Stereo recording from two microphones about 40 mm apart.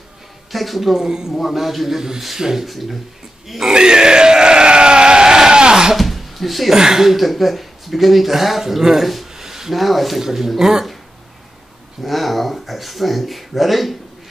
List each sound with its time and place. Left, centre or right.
0.5 s speech: centre
1.0 s a man's voice: centre
1.3 s a man's voice: centre
3.7 s sheep: centre
5.9 s a sound: centre
6.7 s speech: centre
9.3 s a sound: centre
10.2 s speech: centre
12.0 s speech: centre